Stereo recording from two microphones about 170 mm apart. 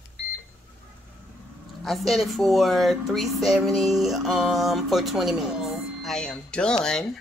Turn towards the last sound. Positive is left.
turn(degrees=5)  # may be behind; listen again after turning